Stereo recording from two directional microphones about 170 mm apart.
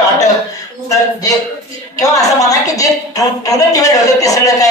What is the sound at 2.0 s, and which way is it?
A woman's voice, 20° left (ahead or behind).